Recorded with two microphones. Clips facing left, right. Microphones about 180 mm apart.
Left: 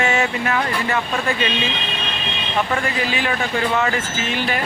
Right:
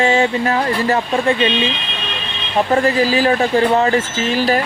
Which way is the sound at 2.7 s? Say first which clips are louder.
Right 8 dB; 35° right (ahead or behind).